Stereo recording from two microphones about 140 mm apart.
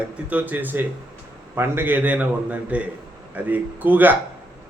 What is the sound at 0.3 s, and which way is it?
Speech, 10° right (ahead or behind).